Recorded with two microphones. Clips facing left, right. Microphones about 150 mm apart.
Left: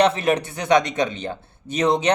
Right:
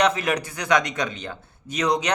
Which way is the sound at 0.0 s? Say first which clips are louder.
Left 3 dB; 30° left (ahead or behind).